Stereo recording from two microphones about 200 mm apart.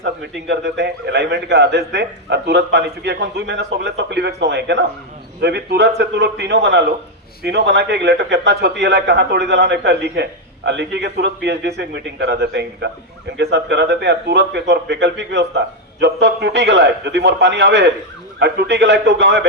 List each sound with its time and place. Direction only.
0.4 s a man's voice: 60° right (ahead or behind)